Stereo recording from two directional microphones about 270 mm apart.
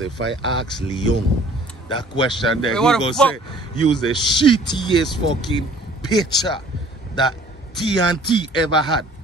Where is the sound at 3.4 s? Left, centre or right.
Centre.